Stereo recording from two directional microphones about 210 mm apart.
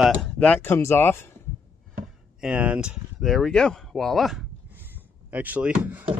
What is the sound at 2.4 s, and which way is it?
Speech, 5° right (ahead or behind).